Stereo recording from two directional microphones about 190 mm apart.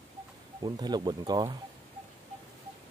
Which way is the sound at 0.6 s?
20° right (ahead or behind).